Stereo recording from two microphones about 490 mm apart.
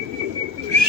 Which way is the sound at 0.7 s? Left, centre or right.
Right.